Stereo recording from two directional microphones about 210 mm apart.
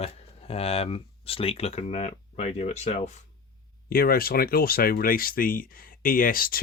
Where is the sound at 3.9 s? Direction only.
45° left (ahead or behind).